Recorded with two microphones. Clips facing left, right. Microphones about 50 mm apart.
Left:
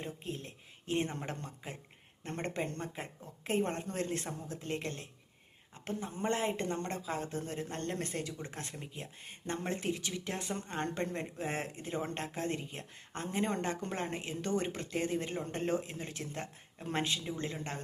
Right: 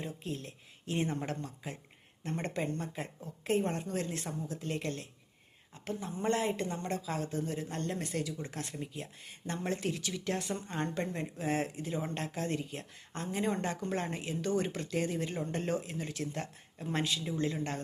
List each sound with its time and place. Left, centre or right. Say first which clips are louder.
0.0 s speech: right 2 dB; left
8.1 s speech: right 3 dB; left